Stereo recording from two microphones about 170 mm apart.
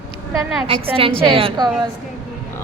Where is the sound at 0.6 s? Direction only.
30° right (ahead or behind).